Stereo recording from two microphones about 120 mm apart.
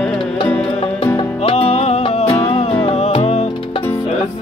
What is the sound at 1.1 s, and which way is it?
Music, 55° left (ahead or behind).